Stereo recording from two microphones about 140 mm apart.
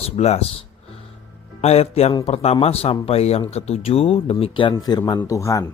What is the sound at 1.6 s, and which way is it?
Speech, 45° left (ahead or behind).